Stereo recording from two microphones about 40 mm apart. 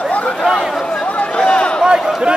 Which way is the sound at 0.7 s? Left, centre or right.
Centre.